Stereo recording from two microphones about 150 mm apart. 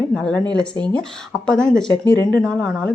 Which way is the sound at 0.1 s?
5° left (ahead or behind).